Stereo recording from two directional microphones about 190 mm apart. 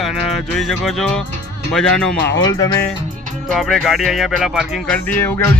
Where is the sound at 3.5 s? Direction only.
Centre (ahead or behind).